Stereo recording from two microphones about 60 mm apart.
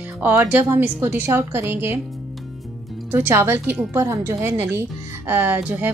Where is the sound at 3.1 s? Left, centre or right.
Right.